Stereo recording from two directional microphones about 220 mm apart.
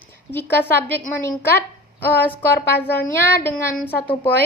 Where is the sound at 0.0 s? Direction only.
10° left (ahead or behind).